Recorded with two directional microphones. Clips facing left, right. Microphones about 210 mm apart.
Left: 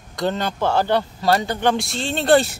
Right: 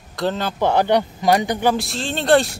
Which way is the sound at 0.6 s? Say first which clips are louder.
Right 3 dB; 15° right (ahead or behind).